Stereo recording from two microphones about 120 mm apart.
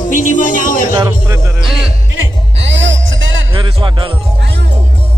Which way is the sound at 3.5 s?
45° right (ahead or behind).